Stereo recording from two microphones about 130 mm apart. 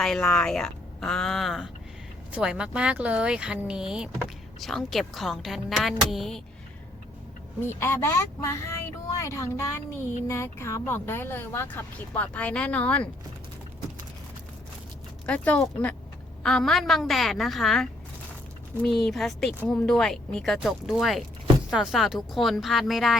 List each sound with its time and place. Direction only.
0.0 s speech: 5° left (ahead or behind)
7.6 s speech: 20° left (ahead or behind)
15.3 s speech: 10° left (ahead or behind)